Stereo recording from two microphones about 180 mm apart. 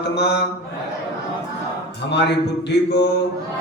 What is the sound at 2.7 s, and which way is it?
Speech, 70° left (ahead or behind).